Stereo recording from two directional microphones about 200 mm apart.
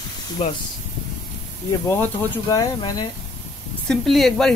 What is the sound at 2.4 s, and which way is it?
Speech, 20° left (ahead or behind).